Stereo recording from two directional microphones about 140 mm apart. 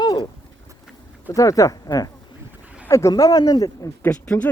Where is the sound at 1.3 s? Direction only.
25° left (ahead or behind).